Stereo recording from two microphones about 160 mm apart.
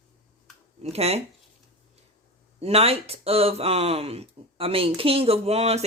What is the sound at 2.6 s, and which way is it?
Speech, 40° right (ahead or behind).